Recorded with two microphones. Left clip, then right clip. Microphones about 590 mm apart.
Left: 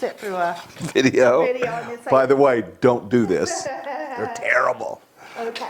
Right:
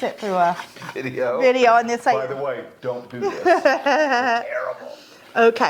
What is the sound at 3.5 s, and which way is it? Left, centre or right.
Speech, right.